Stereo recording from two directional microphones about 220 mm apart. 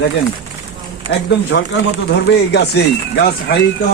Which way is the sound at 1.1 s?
55° left (ahead or behind).